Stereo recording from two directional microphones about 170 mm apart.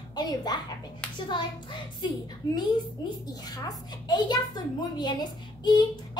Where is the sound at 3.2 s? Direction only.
20° left (ahead or behind).